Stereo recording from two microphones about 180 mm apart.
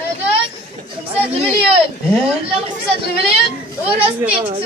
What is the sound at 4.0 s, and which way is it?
Speech, 10° right (ahead or behind).